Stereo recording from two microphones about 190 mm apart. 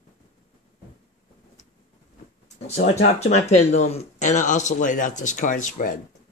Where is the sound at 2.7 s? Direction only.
35° left (ahead or behind).